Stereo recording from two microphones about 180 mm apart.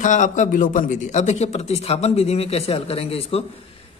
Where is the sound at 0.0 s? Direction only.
45° left (ahead or behind).